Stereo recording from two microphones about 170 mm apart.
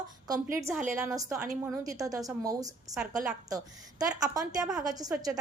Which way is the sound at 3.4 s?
20° right (ahead or behind).